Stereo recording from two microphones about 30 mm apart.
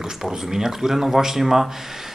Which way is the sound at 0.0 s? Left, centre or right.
Centre.